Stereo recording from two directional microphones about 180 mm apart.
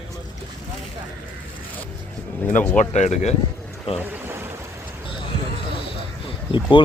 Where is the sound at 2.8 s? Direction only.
40° left (ahead or behind).